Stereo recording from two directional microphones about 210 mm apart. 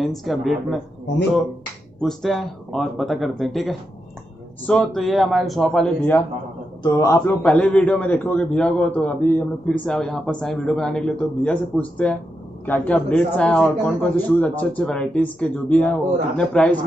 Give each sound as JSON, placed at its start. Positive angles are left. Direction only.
{"t": 0.0, "sound": "a man's voice", "side_deg": 0}
{"t": 2.0, "sound": "a man's voice", "side_deg": 0}
{"t": 7.4, "sound": "a man's voice", "side_deg": 5}